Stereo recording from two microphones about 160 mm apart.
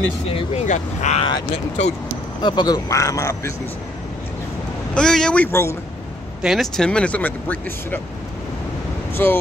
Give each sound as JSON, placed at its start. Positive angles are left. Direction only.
{"t": 0.4, "sound": "speech", "side_deg": 45}
{"t": 2.4, "sound": "speech", "side_deg": 30}
{"t": 4.9, "sound": "speech", "side_deg": 5}
{"t": 6.4, "sound": "speech", "side_deg": 0}
{"t": 9.1, "sound": "speech", "side_deg": 15}